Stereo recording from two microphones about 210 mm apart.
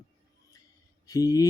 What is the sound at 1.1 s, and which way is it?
Speech, 20° left (ahead or behind).